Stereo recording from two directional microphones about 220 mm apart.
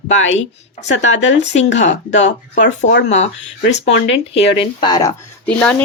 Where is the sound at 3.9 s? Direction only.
55° left (ahead or behind).